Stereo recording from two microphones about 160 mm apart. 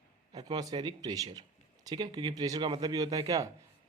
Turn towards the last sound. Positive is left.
turn(degrees=-20)  # may be behind; listen again after turning